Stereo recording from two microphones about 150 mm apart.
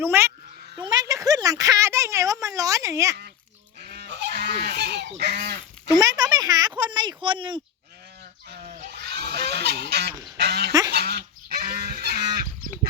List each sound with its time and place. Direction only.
0.0 s speech: 15° right (ahead or behind)
0.8 s speech: 30° right (ahead or behind)
3.8 s goose: 90° right
5.9 s speech: 25° right (ahead or behind)
8.4 s goose: 80° right
10.3 s duck: 90° right
10.7 s goose: 20° right (ahead or behind)
10.9 s goose: 90° right